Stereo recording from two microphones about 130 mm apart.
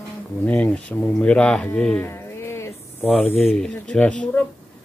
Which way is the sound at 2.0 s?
20° left (ahead or behind).